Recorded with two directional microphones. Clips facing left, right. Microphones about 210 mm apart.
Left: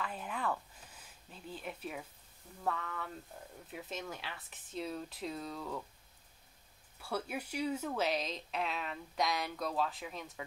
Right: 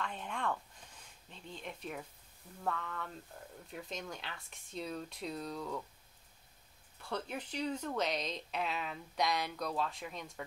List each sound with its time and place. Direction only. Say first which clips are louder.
0.0 s speech: even; 5° left (ahead or behind)
7.0 s speech: left 1 dB; 10° left (ahead or behind)